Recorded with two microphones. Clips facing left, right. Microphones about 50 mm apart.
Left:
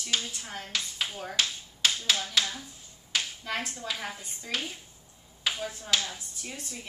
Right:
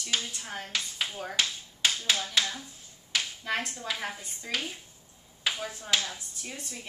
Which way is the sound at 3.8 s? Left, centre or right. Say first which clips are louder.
Right 1 dB; centre.